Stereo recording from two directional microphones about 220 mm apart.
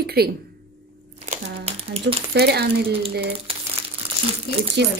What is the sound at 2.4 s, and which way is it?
Speech, 45° right (ahead or behind).